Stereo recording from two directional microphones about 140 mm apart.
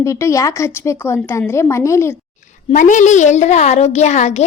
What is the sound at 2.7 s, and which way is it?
A woman's voice, 60° left (ahead or behind).